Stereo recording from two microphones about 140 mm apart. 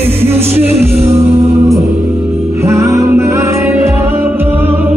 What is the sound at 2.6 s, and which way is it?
Music, 20° right (ahead or behind).